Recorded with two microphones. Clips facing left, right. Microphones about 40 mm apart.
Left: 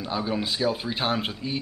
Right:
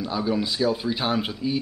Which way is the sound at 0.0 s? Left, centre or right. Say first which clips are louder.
Right 3 dB; centre.